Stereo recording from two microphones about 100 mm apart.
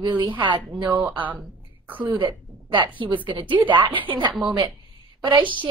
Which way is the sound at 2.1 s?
55° right (ahead or behind).